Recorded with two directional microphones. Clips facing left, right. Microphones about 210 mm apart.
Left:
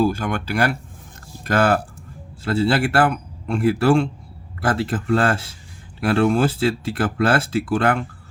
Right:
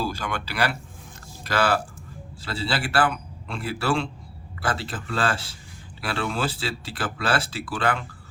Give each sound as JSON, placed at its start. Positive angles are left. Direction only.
{"t": 0.0, "sound": "speech", "side_deg": 50}